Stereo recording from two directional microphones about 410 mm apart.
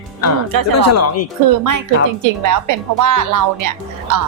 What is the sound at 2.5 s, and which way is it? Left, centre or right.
Speech, right.